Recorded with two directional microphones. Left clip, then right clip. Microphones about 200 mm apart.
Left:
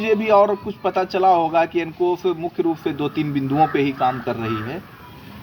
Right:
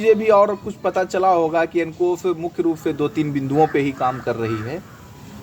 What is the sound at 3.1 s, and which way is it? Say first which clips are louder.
Speech: right 1 dB; 90° right.